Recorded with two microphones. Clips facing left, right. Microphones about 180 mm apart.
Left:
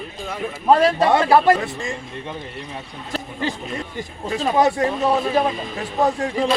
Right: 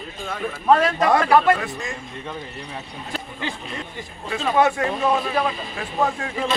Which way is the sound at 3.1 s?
35° left (ahead or behind).